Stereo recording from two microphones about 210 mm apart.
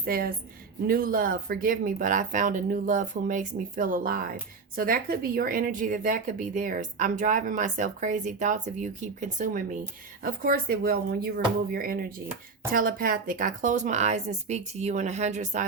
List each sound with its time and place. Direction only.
0.0 s speech: 45° right (ahead or behind)